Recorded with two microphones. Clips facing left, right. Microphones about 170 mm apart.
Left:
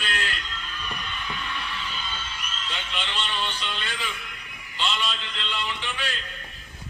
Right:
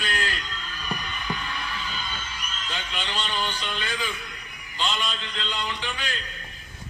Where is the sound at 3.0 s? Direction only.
40° right (ahead or behind).